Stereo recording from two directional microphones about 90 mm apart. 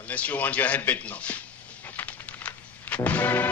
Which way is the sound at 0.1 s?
15° left (ahead or behind).